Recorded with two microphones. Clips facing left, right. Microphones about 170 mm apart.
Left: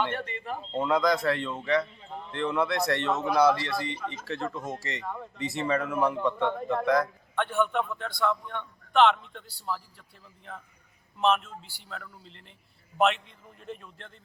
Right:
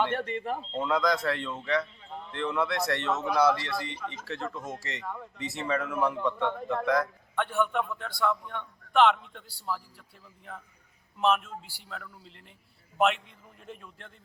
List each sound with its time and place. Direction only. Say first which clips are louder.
0.1 s speech: right 4 dB; 60° right (ahead or behind)
0.7 s a man's voice: left 3 dB; 5° left (ahead or behind)
11.2 s a man's voice: left 1 dB; 5° right (ahead or behind)